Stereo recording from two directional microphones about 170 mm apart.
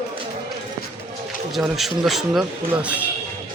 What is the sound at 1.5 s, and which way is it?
Speech, centre (ahead or behind).